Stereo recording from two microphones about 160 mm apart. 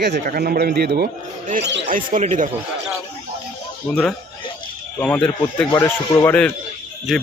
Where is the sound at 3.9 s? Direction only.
5° left (ahead or behind).